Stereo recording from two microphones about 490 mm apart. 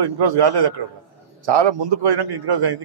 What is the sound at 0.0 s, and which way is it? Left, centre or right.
A man's voice, right.